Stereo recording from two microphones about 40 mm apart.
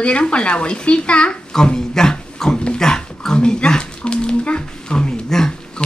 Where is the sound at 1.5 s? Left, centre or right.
Centre.